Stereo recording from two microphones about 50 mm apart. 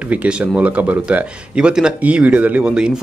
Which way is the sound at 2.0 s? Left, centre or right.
Right.